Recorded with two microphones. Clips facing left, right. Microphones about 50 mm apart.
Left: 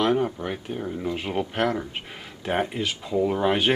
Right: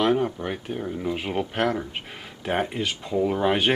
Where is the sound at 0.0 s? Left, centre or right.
Centre.